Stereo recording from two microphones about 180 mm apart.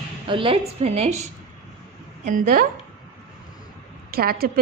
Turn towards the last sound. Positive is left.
turn(degrees=-60)  # may be behind; listen again after turning